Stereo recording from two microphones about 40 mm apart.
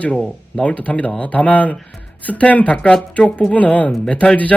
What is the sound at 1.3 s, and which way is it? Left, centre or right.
Speech, left.